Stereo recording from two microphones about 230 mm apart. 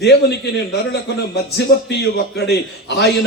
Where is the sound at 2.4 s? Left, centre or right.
Left.